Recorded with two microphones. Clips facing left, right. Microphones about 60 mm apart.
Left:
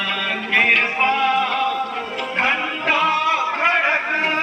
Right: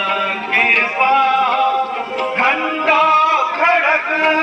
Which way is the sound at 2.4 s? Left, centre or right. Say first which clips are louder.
Right 4 dB; right.